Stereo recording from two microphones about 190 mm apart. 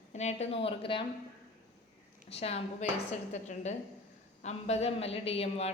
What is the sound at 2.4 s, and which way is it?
Speech, 35° left (ahead or behind).